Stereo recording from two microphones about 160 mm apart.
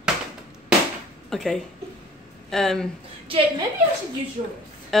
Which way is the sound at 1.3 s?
Centre (ahead or behind).